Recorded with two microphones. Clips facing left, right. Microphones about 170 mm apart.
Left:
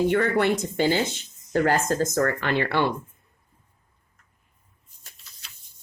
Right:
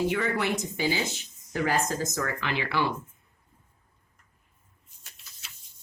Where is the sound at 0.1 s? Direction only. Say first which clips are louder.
Left 6 dB; 60° left (ahead or behind).